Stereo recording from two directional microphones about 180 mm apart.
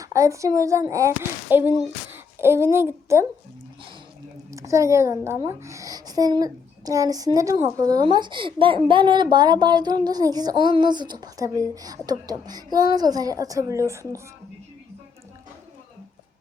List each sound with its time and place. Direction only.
0.0 s a child's voice: 15° right (ahead or behind)
4.5 s a child's voice: 15° right (ahead or behind)